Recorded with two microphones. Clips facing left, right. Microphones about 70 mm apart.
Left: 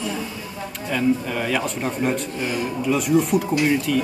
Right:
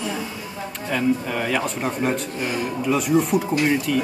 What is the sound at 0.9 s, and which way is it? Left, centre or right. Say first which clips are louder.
Speech: left 1 dB; centre.